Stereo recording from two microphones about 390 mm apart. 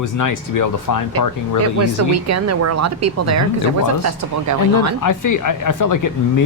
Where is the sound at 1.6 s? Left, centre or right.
Right.